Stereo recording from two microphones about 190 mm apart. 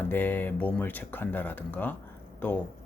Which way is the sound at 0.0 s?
10° left (ahead or behind).